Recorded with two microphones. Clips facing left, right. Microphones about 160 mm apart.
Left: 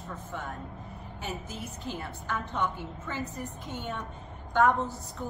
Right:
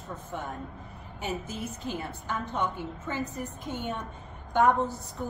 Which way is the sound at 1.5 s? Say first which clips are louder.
Right 3 dB; 15° right (ahead or behind).